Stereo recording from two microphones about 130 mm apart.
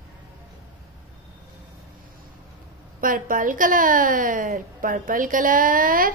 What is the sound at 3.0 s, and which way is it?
A woman's voice, 90° right.